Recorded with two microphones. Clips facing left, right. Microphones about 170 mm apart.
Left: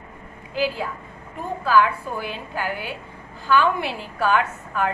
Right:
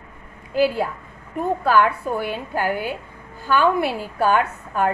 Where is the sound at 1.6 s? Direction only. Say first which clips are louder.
Even; 55° right (ahead or behind).